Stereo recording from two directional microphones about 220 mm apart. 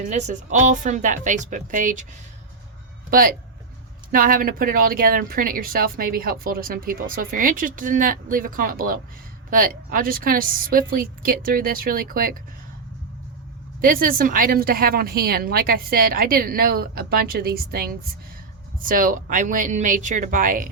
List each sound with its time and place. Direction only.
0.0 s speech: 30° right (ahead or behind)
3.1 s speech: 40° right (ahead or behind)
13.8 s speech: 40° right (ahead or behind)